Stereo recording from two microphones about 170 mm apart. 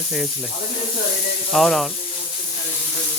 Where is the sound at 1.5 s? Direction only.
Centre (ahead or behind).